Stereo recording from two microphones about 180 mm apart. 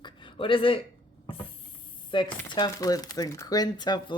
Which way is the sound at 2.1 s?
25° left (ahead or behind).